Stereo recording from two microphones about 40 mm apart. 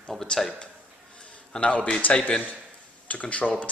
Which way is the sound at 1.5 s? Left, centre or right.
Left.